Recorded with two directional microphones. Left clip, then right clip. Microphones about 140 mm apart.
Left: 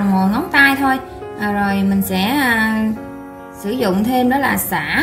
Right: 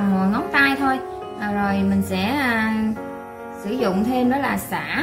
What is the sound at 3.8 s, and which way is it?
A woman's voice, 40° left (ahead or behind).